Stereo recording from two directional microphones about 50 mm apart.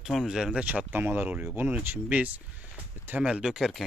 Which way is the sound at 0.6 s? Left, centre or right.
Right.